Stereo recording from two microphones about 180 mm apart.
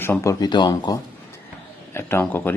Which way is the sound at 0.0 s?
15° left (ahead or behind).